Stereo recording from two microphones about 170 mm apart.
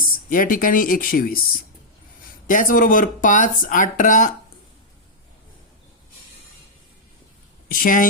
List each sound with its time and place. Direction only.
0.0 s speech: 55° left (ahead or behind)
2.5 s speech: 50° left (ahead or behind)
7.7 s speech: 55° left (ahead or behind)